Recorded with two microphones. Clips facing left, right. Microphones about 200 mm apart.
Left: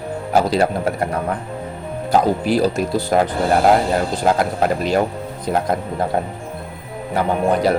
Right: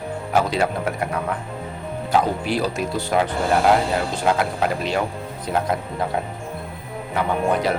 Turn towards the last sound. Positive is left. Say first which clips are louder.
# left 4 dB
turn(degrees=35)  # may be behind; listen again after turning